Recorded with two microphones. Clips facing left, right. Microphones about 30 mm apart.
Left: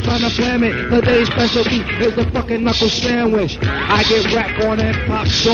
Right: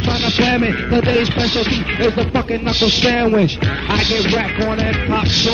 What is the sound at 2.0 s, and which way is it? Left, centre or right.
Music, right.